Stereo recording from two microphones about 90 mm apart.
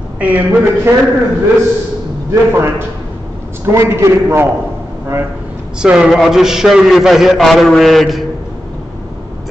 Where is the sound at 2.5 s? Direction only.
25° right (ahead or behind).